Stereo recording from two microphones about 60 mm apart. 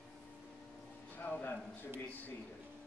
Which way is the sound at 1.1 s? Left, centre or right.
Left.